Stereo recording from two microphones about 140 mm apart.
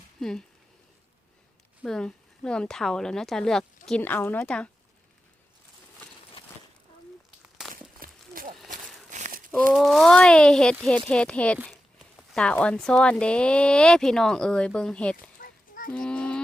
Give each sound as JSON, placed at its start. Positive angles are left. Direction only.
{"t": 0.2, "sound": "speech", "side_deg": 5}
{"t": 1.8, "sound": "speech", "side_deg": 5}
{"t": 7.9, "sound": "a sound", "side_deg": -90}
{"t": 8.7, "sound": "a sound", "side_deg": -60}
{"t": 9.7, "sound": "speech", "side_deg": 0}
{"t": 15.4, "sound": "honk", "side_deg": 80}
{"t": 15.9, "sound": "speech", "side_deg": 5}